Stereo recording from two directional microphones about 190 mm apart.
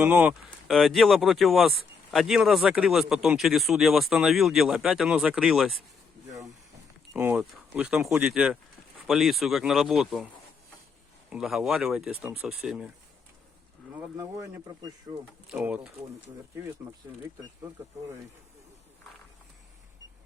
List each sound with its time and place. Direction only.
0.0 s speech: 10° right (ahead or behind)
7.1 s speech: 10° right (ahead or behind)
11.3 s speech: centre (ahead or behind)
14.2 s speech: 15° right (ahead or behind)
15.4 s speech: 10° right (ahead or behind)